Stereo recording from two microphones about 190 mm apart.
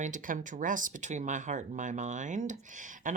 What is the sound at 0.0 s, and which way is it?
Speech, 40° right (ahead or behind).